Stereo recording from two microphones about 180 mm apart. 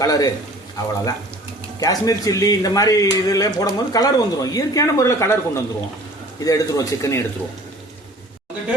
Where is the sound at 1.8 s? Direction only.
20° left (ahead or behind).